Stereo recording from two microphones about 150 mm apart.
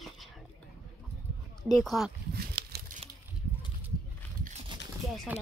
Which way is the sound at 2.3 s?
90° right.